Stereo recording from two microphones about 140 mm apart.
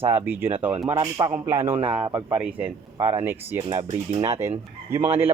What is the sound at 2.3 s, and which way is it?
Speech, 10° right (ahead or behind).